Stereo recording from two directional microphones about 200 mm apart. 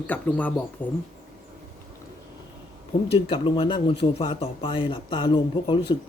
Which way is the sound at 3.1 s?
25° left (ahead or behind).